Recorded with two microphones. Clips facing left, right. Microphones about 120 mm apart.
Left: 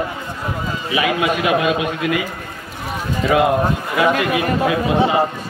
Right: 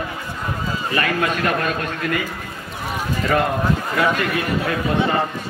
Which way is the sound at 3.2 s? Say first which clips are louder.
Left 4 dB; 10° left (ahead or behind).